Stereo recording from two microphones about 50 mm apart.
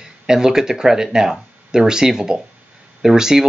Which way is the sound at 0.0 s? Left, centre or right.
Centre.